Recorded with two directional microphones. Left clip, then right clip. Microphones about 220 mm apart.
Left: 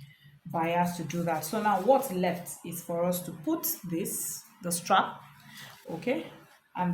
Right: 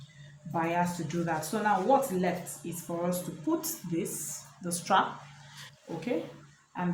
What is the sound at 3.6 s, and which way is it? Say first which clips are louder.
Speech: even; 30° left (ahead or behind).